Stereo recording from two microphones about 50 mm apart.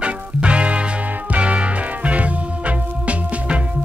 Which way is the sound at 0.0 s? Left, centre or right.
Right.